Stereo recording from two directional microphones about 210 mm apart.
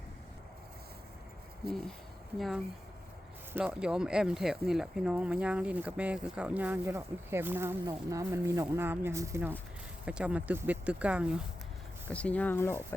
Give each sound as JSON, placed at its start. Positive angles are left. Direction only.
{"t": 1.6, "sound": "speech", "side_deg": -50}
{"t": 3.5, "sound": "speech", "side_deg": -5}
{"t": 12.0, "sound": "speech", "side_deg": 5}